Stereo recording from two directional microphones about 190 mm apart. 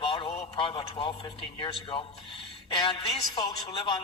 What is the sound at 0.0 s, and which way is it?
A man's voice, 30° left (ahead or behind).